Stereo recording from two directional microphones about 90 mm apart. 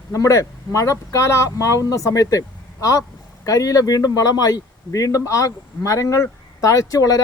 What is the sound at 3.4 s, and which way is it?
Speech, 40° left (ahead or behind).